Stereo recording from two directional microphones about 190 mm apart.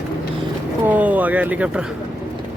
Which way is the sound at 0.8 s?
10° right (ahead or behind).